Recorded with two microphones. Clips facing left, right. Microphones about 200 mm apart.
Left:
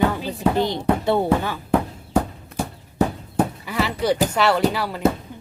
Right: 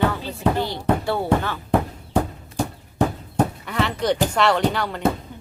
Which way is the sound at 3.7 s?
5° left (ahead or behind).